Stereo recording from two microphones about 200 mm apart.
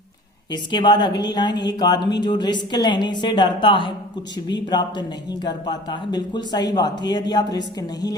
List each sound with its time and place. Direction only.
0.5 s speech: 20° left (ahead or behind)